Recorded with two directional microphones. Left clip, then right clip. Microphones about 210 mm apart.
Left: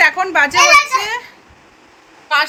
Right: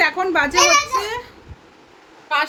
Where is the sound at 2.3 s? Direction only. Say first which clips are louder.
Left 5 dB; centre (ahead or behind).